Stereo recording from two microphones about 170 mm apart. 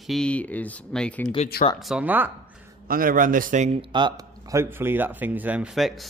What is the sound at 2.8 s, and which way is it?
A man's voice, 55° right (ahead or behind).